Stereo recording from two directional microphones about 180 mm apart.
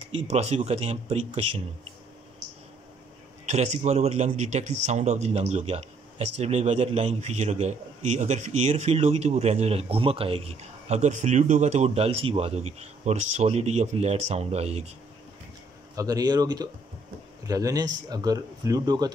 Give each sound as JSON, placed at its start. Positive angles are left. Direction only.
{"t": 0.3, "sound": "a man's voice", "side_deg": -35}
{"t": 3.4, "sound": "a man's voice", "side_deg": -40}
{"t": 16.0, "sound": "speech", "side_deg": -20}